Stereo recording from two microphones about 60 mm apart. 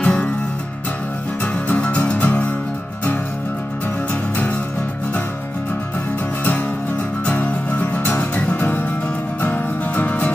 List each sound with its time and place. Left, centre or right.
0.0 s music: centre
1.4 s music: left
4.1 s music: left
7.2 s music: left